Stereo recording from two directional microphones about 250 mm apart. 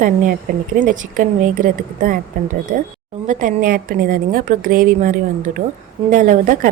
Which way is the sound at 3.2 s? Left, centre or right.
Right.